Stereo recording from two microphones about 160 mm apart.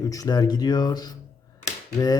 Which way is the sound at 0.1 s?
25° left (ahead or behind).